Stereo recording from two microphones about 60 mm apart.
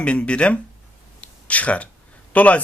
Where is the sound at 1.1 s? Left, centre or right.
Left.